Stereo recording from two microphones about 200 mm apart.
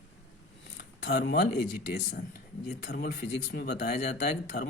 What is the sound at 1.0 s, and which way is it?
Speech, 55° left (ahead or behind).